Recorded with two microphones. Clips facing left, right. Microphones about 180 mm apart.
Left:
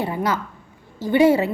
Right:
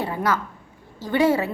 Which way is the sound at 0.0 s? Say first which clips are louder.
Left 1 dB; 15° left (ahead or behind).